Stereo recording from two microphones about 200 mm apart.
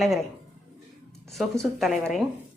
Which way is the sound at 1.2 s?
Centre (ahead or behind).